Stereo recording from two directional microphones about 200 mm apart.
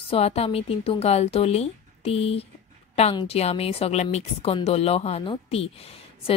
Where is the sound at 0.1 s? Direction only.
30° left (ahead or behind).